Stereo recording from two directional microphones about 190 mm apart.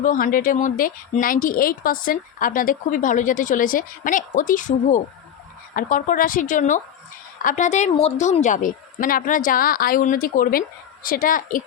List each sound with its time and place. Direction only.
0.0 s speech: 45° left (ahead or behind)